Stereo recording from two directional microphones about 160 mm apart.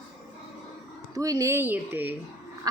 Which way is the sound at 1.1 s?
20° right (ahead or behind).